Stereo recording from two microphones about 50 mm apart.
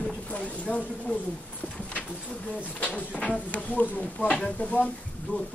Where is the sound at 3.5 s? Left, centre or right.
Left.